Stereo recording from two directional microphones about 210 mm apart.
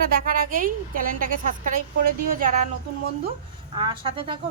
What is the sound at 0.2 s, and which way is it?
A woman's voice, 40° right (ahead or behind).